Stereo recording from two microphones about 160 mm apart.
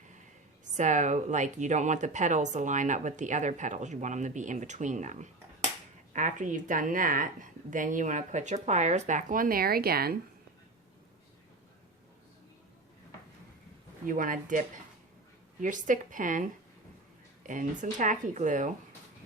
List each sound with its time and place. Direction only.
0.6 s a woman's voice: 50° right (ahead or behind); by 10.2 s 75° right (ahead or behind)
14.0 s a woman's voice: 60° right (ahead or behind)
15.6 s a woman's voice: 55° right (ahead or behind)
17.4 s speech: 55° right (ahead or behind)